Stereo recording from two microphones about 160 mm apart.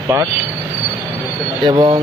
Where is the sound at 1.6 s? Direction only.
30° right (ahead or behind).